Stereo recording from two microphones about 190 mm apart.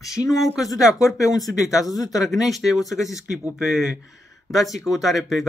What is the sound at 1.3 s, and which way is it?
Speech, 20° left (ahead or behind).